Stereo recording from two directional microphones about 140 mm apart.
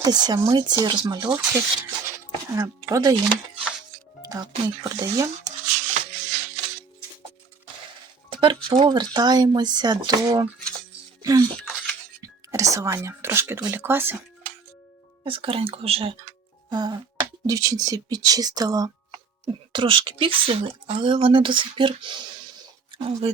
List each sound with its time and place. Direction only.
0.0 s speech: 30° right (ahead or behind)
1.3 s speech: 10° right (ahead or behind)
2.6 s speech: 25° right (ahead or behind)
4.3 s speech: 25° right (ahead or behind)
5.5 s music: 55° right (ahead or behind)
8.3 s speech: 35° right (ahead or behind); by 14.2 s 15° right (ahead or behind)
15.2 s speech: 40° right (ahead or behind)